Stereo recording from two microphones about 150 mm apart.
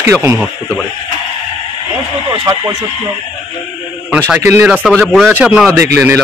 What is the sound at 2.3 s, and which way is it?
Speech, 25° right (ahead or behind).